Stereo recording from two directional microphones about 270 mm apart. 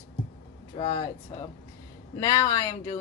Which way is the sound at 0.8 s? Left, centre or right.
Centre.